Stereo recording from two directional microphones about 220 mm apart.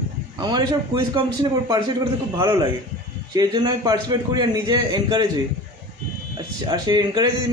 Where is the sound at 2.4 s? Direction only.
20° right (ahead or behind).